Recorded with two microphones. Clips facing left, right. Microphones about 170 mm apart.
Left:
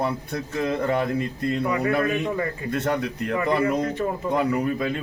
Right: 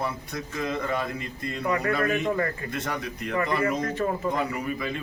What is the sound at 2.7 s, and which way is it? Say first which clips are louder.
Speech: left 7 dB; 60° left (ahead or behind).